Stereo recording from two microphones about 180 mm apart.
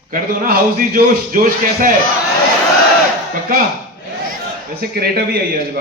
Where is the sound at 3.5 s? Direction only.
55° right (ahead or behind).